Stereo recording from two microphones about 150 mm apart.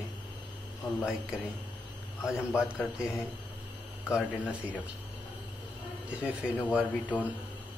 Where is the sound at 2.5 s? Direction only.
15° left (ahead or behind).